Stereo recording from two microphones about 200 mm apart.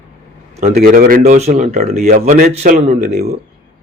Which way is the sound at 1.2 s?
35° right (ahead or behind).